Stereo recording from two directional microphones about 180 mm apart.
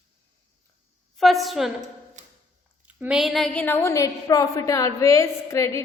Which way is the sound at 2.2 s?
45° right (ahead or behind).